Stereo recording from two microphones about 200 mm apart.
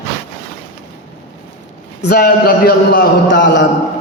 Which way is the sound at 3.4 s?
65° left (ahead or behind).